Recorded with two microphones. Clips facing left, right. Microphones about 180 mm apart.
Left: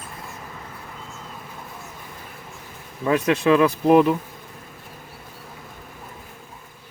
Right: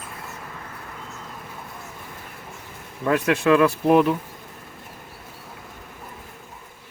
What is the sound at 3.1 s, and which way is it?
Speech, 5° right (ahead or behind).